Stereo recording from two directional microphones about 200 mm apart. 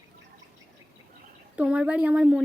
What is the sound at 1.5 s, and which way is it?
Speech, 5° right (ahead or behind).